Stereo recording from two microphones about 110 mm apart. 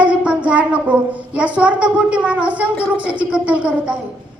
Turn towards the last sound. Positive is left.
turn(degrees=-10)  # may be behind; listen again after turning